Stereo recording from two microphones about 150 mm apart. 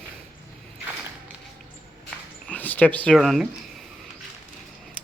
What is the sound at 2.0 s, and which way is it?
Dog, 10° left (ahead or behind).